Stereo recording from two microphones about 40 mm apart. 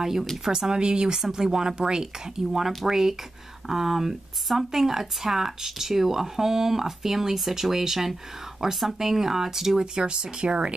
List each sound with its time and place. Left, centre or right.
0.0 s speech: centre